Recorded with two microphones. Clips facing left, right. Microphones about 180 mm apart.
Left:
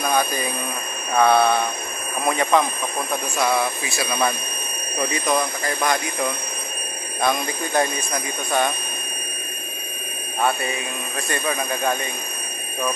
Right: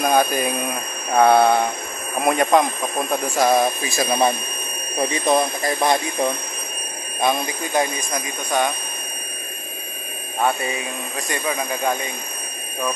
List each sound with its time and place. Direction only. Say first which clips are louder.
0.0 s speech: right 4 dB; 45° right (ahead or behind)
1.1 s a sound: right 3 dB; 45° right (ahead or behind)
3.1 s speech: right 4 dB; 40° right (ahead or behind)
7.2 s speech: right 1 dB; 20° right (ahead or behind)
11.1 s speech: even; 15° right (ahead or behind)